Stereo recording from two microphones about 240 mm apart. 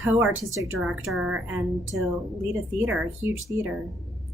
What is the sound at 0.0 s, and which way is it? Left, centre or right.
A woman's voice, centre.